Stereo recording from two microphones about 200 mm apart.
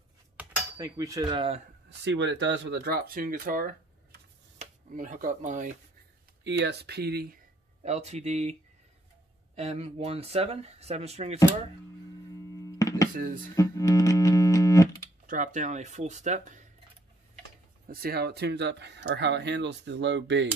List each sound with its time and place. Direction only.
0.4 s cutlery: 5° right (ahead or behind)
0.7 s speech: 15° right (ahead or behind)
1.9 s speech: 60° right (ahead or behind); by 5.7 s 40° right (ahead or behind)
6.4 s speech: 60° right (ahead or behind)
7.8 s speech: 35° right (ahead or behind)
9.6 s speech: 30° right (ahead or behind)
12.5 s a sound: 15° left (ahead or behind)
13.1 s speech: 40° right (ahead or behind)
13.6 s music: 15° left (ahead or behind)
15.2 s speech: 40° right (ahead or behind)
17.8 s speech: 50° right (ahead or behind)